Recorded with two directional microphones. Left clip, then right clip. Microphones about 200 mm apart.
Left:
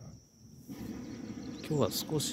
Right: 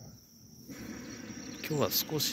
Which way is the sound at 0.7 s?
55° left (ahead or behind).